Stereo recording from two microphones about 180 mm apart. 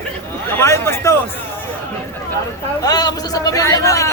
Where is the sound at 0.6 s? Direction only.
15° left (ahead or behind).